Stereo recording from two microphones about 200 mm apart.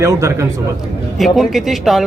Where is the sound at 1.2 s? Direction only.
Centre (ahead or behind).